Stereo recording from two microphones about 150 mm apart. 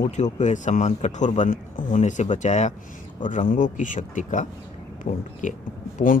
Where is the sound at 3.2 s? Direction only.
65° left (ahead or behind).